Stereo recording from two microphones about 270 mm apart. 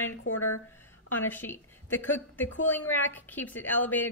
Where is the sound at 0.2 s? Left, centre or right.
Left.